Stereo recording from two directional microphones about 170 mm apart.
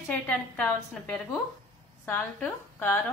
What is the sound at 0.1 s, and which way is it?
A woman's voice, 5° left (ahead or behind).